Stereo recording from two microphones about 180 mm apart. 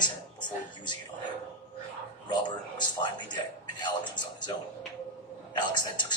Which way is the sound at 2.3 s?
25° left (ahead or behind).